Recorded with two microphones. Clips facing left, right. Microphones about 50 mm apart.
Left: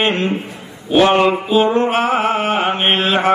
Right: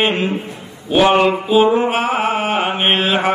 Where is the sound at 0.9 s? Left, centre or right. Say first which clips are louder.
Even; centre.